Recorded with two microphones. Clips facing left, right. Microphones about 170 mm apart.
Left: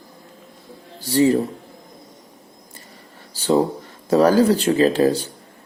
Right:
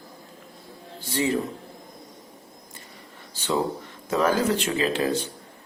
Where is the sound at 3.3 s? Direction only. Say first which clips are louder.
Left 8 dB; 35° left (ahead or behind).